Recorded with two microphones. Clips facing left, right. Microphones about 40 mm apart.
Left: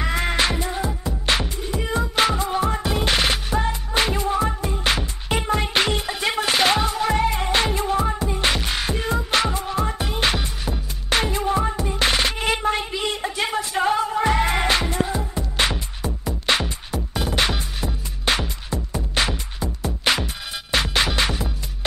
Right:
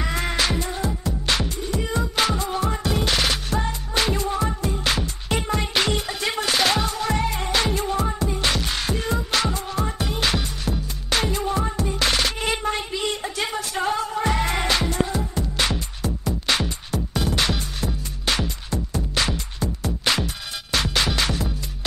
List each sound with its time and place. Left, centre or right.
0.0 s music: centre
9.3 s music: left